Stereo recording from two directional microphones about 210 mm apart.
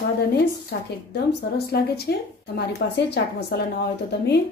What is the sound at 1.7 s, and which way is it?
A woman's voice, 50° left (ahead or behind).